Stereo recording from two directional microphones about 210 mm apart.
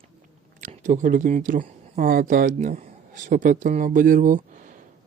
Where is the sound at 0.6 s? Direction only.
35° right (ahead or behind).